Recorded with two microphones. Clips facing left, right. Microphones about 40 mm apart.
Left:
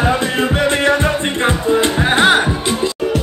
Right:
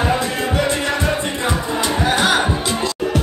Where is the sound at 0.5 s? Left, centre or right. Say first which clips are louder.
Left 5 dB; left.